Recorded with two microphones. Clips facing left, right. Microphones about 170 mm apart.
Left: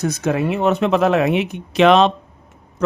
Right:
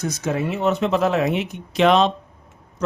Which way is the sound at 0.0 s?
60° left (ahead or behind).